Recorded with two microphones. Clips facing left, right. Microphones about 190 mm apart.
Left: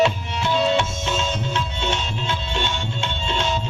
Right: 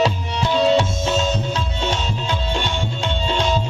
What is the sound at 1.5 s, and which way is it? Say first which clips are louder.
Music: right 2 dB; 35° right (ahead or behind).